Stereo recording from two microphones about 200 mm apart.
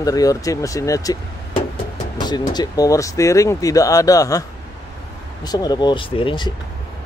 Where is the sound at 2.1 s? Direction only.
20° left (ahead or behind).